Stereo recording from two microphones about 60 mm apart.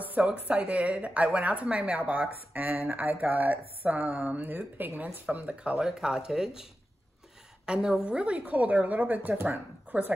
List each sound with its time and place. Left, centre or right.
0.0 s a sound: right
0.3 s a woman's voice: right
5.2 s a woman's voice: right
5.8 s a woman's voice: centre; by 9.9 s right